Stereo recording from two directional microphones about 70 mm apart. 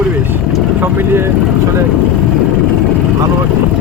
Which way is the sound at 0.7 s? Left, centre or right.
Right.